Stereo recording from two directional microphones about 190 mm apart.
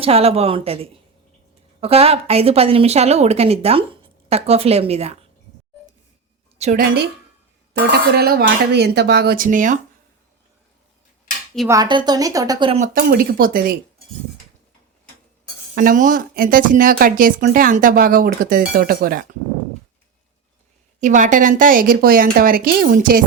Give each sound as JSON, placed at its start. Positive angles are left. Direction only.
{"t": 0.0, "sound": "speech", "side_deg": -30}
{"t": 6.6, "sound": "a woman's voice", "side_deg": -40}
{"t": 7.7, "sound": "speech", "side_deg": -55}
{"t": 11.7, "sound": "speech", "side_deg": -20}
{"t": 12.8, "sound": "speech", "side_deg": -45}
{"t": 15.7, "sound": "speech", "side_deg": -45}
{"t": 21.0, "sound": "speech", "side_deg": -40}